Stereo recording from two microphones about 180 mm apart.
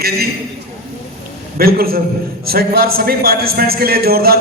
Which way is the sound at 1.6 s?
55° right (ahead or behind).